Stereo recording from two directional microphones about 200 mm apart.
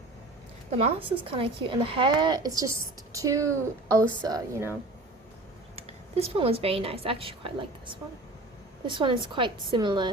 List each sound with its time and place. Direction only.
0.7 s speech: 30° right (ahead or behind)
5.7 s a woman's voice: 30° right (ahead or behind)